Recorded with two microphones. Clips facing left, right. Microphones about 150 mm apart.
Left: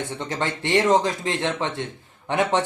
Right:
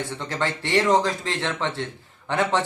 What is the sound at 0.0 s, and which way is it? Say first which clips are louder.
Speech: even; 20° left (ahead or behind).